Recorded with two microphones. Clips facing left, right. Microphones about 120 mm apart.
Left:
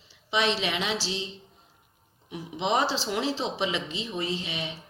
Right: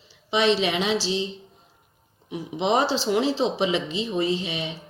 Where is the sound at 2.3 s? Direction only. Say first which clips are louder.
Right 4 dB; 25° right (ahead or behind).